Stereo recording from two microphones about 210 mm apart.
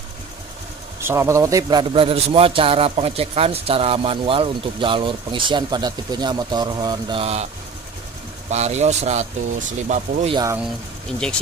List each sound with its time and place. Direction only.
1.0 s a man's voice: 10° right (ahead or behind); by 7.4 s 30° right (ahead or behind)
8.5 s a man's voice: 30° right (ahead or behind)
10.3 s speech: 15° right (ahead or behind)